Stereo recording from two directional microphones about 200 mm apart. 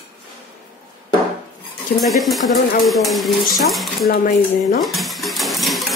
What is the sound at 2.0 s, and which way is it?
Stir, centre (ahead or behind).